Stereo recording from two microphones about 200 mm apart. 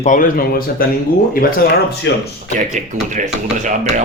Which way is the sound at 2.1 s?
60° left (ahead or behind).